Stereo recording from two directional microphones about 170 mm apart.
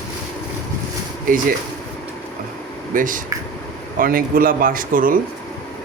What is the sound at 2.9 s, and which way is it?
Speech, 50° right (ahead or behind).